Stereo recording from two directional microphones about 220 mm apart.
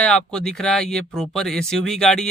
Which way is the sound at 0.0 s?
5° left (ahead or behind).